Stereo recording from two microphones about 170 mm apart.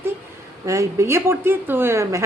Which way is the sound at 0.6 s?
20° right (ahead or behind).